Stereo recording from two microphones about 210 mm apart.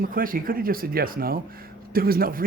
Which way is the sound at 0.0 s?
40° right (ahead or behind).